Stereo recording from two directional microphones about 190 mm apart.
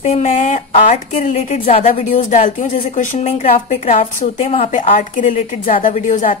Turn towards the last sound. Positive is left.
turn(degrees=45)  # may be behind; listen again after turning